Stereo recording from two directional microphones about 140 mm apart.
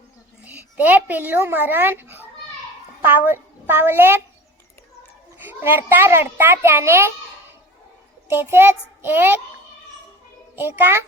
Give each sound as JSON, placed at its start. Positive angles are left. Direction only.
{"t": 0.4, "sound": "a child's voice", "side_deg": -10}
{"t": 5.4, "sound": "a child's voice", "side_deg": -15}
{"t": 8.3, "sound": "a child's voice", "side_deg": -15}
{"t": 10.5, "sound": "a child's voice", "side_deg": -15}